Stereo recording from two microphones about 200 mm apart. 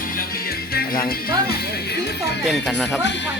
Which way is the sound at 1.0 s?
50° left (ahead or behind).